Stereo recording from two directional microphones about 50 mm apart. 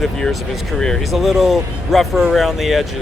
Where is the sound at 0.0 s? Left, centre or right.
Centre.